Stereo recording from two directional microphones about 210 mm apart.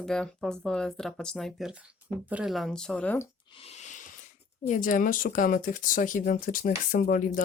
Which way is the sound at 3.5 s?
30° left (ahead or behind).